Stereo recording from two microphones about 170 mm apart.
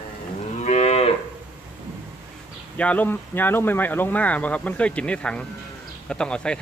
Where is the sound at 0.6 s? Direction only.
40° left (ahead or behind).